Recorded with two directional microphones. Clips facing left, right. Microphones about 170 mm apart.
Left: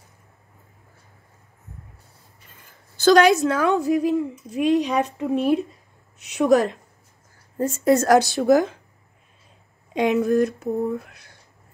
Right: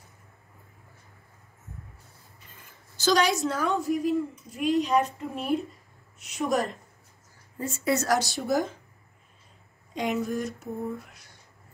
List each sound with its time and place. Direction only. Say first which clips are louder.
3.0 s a woman's voice: left 9 dB; 60° left (ahead or behind); by 5.6 s 85° left
6.2 s speech: left 9 dB; 70° left (ahead or behind)
7.5 s a woman's voice: left 9 dB; 40° left (ahead or behind)
8.4 s a woman's voice: left 9 dB; 65° left (ahead or behind)
9.9 s a woman's voice: left 10 dB; 65° left (ahead or behind)